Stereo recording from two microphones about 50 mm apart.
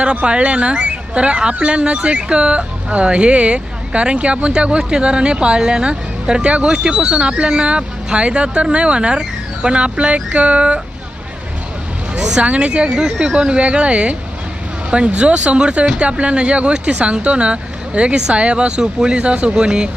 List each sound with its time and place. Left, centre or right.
0.0 s speech: right
12.1 s a sound: centre
12.5 s speech: right